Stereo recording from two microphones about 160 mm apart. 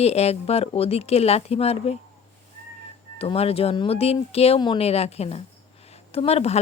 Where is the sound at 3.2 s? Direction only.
40° left (ahead or behind).